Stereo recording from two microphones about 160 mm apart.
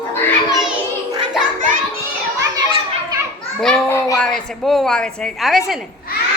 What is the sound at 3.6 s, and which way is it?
Speech, 5° left (ahead or behind).